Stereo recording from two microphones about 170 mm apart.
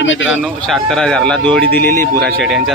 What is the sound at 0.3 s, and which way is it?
Speech, centre (ahead or behind).